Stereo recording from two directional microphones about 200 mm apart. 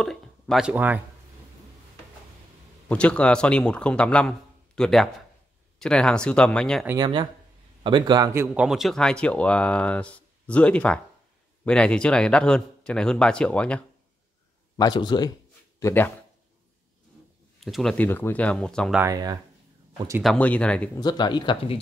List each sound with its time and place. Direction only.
0.0 s speech: centre (ahead or behind)
2.9 s speech: 5° left (ahead or behind)
6.9 s a man's voice: 20° right (ahead or behind)
8.6 s speech: centre (ahead or behind)
14.8 s speech: 20° left (ahead or behind)
15.8 s speech: 10° left (ahead or behind)
17.6 s speech: centre (ahead or behind)
18.9 s speech: 15° right (ahead or behind)
20.2 s speech: 5° left (ahead or behind)
21.0 s speech: 20° left (ahead or behind)